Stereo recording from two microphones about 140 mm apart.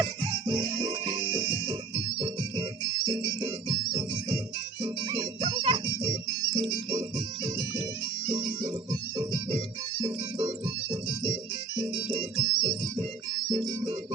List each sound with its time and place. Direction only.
0.0 s music: 30° right (ahead or behind)
8.3 s music: 30° right (ahead or behind)
11.8 s music: 35° right (ahead or behind)